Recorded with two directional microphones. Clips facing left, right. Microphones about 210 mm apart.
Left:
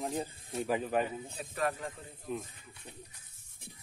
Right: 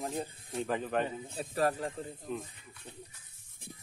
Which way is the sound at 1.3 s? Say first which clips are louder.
Right 6 dB; 35° right (ahead or behind).